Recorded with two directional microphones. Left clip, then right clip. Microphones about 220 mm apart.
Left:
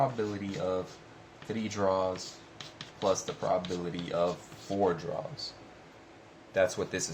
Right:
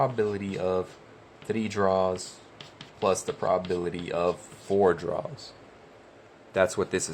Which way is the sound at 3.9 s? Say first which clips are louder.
Right 1 dB; 50° right (ahead or behind).